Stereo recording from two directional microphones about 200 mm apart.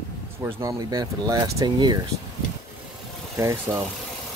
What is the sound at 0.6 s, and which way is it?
Speech, 20° right (ahead or behind).